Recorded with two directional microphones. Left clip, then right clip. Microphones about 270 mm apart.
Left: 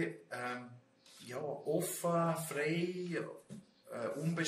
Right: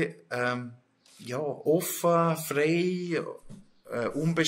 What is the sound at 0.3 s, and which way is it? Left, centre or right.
Speech, right.